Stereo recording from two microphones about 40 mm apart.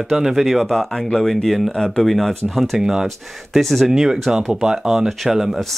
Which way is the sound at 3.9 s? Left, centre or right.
Centre.